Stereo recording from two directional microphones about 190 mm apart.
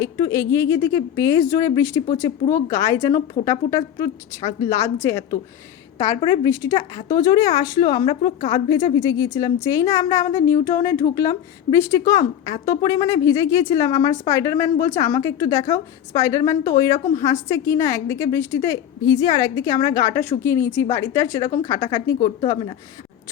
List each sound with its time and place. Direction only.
0.0 s a woman's voice: 15° left (ahead or behind)